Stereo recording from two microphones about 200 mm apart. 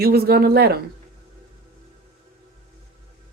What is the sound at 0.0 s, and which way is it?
Speech, 50° right (ahead or behind).